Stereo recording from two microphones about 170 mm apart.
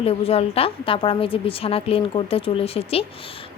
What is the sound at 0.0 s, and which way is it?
A woman's voice, 35° left (ahead or behind).